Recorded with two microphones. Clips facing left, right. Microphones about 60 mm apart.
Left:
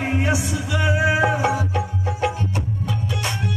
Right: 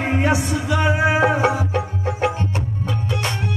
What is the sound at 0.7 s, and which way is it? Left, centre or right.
Music, right.